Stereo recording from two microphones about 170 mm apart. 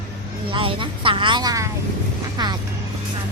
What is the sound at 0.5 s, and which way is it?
Speech, 30° right (ahead or behind).